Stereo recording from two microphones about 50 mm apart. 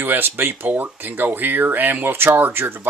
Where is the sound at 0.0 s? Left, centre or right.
Right.